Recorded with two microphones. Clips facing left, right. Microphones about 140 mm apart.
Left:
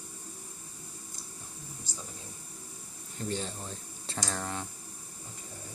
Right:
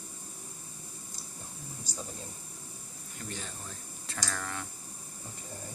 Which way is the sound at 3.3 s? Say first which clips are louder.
Left 7 dB; 30° left (ahead or behind).